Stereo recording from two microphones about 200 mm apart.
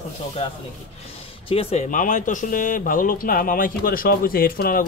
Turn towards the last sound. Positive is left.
turn(degrees=45)  # may be behind; listen again after turning